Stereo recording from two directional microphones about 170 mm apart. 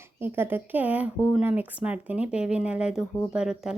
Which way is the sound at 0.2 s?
10° right (ahead or behind).